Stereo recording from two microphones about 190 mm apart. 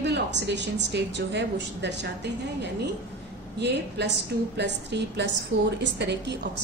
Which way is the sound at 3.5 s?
65° right (ahead or behind).